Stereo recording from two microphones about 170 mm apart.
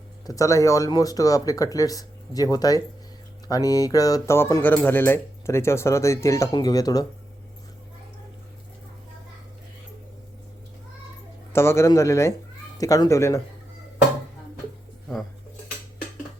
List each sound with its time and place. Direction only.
0.3 s speech: 20° left (ahead or behind)
11.5 s speech: 15° left (ahead or behind)